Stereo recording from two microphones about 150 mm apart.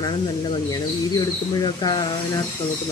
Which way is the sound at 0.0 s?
35° left (ahead or behind).